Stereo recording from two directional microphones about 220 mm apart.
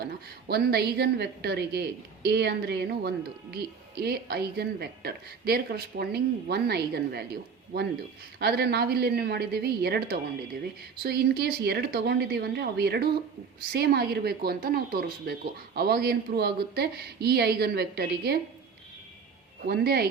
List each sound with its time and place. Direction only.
0.0 s speech: 45° right (ahead or behind)
8.4 s speech: 45° right (ahead or behind)
19.6 s speech: 45° right (ahead or behind)